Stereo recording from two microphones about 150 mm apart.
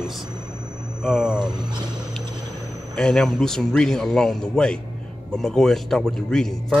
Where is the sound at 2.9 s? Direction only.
5° left (ahead or behind).